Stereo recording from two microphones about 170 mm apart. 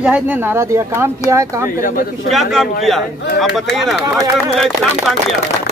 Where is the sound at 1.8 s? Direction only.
55° left (ahead or behind).